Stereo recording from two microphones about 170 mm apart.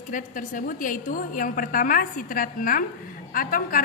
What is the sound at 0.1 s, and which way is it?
A woman's voice, 50° left (ahead or behind).